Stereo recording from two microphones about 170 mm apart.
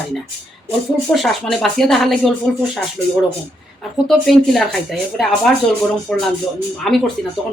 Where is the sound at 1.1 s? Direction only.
Centre (ahead or behind).